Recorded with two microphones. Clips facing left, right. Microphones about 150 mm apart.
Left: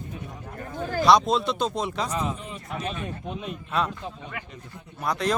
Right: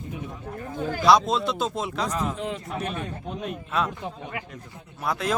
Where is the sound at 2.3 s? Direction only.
90° right.